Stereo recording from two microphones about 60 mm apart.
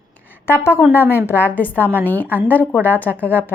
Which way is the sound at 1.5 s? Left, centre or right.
Left.